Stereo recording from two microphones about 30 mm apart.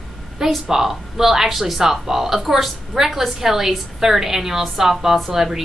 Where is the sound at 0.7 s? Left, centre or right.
Centre.